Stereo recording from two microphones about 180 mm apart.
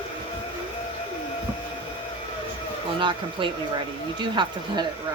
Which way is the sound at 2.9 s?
25° right (ahead or behind).